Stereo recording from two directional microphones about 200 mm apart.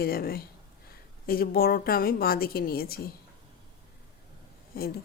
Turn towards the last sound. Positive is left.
turn(degrees=50)  # may be behind; listen again after turning